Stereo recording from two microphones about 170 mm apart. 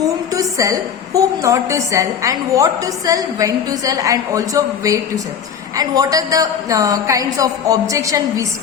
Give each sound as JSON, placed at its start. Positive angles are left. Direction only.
{"t": 0.0, "sound": "a woman's voice", "side_deg": -20}